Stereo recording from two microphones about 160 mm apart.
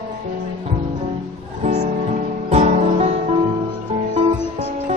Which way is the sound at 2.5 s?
45° right (ahead or behind).